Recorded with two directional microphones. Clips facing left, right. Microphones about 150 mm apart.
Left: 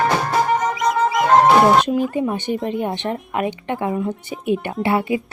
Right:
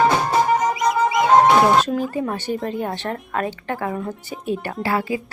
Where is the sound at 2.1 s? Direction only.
15° left (ahead or behind).